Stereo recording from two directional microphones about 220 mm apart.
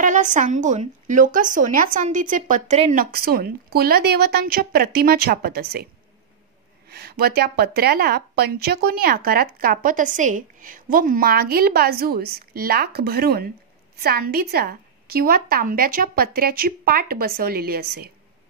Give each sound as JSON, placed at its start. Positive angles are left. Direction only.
{"t": 0.0, "sound": "a woman's voice", "side_deg": -35}
{"t": 6.9, "sound": "speech", "side_deg": -45}